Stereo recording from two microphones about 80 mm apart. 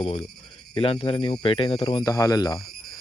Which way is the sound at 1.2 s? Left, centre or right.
Left.